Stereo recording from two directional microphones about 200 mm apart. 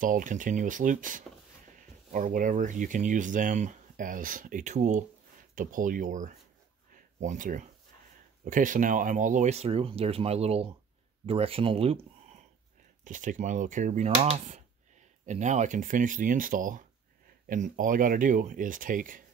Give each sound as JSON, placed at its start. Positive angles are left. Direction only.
{"t": 0.0, "sound": "speech", "side_deg": -40}
{"t": 13.0, "sound": "speech", "side_deg": -40}